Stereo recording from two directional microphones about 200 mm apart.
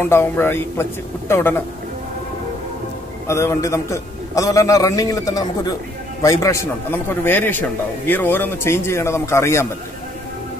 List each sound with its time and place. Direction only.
0.0 s a man's voice: 10° left (ahead or behind)
3.3 s a man's voice: 15° left (ahead or behind)